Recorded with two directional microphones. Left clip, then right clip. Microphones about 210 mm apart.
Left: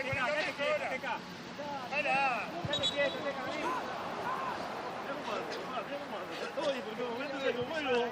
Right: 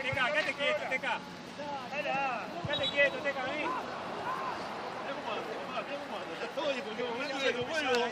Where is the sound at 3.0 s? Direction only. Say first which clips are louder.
Right 7 dB; 30° right (ahead or behind).